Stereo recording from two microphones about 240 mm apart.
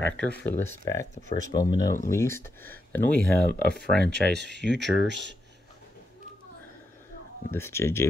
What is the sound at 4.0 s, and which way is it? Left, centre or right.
Speech, right.